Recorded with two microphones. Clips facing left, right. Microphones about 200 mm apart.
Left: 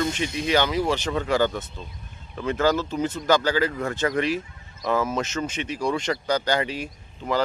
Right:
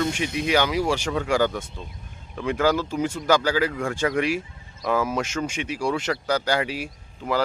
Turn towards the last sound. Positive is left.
turn(degrees=5)  # may be behind; listen again after turning